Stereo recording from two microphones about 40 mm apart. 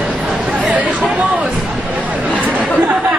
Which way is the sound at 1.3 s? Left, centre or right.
Right.